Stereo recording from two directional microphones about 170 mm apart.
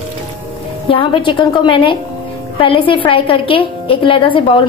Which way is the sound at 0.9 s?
30° left (ahead or behind).